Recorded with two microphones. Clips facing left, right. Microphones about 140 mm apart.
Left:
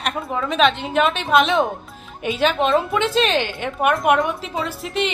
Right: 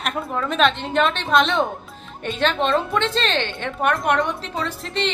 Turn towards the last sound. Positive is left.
turn(degrees=5)  # may be behind; listen again after turning